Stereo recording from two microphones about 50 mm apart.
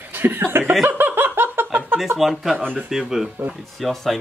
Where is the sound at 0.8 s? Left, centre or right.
Right.